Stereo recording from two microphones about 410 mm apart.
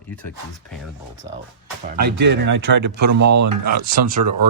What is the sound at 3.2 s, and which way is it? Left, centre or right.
Speech, right.